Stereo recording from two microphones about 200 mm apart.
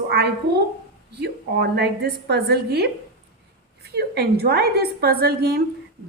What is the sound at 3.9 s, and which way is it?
A woman's voice, 55° right (ahead or behind).